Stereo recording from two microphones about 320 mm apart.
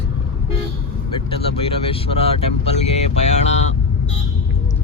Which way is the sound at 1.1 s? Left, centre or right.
Centre.